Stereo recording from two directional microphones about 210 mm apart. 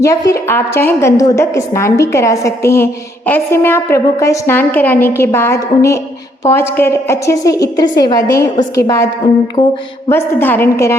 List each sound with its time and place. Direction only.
0.0 s a woman's voice: 15° left (ahead or behind)
9.6 s music: 30° left (ahead or behind)
10.1 s a woman's voice: 10° left (ahead or behind)